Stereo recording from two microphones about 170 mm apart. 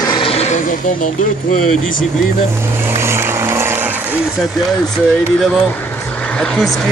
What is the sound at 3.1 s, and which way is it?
Vehicle, 15° right (ahead or behind).